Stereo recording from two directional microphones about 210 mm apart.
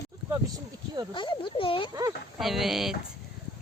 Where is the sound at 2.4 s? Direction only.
Centre (ahead or behind).